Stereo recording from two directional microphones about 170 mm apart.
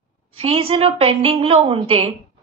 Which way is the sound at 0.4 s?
35° right (ahead or behind).